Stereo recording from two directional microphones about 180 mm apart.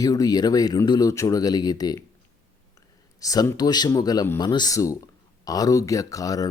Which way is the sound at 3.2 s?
20° left (ahead or behind).